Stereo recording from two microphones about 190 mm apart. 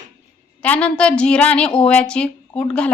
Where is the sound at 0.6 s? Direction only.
5° left (ahead or behind).